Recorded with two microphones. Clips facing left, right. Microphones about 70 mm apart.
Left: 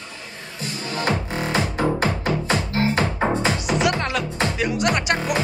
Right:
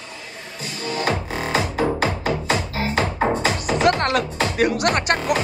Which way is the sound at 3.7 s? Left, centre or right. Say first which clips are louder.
Right 6 dB; right.